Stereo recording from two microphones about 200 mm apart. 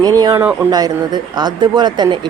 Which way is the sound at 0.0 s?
20° right (ahead or behind).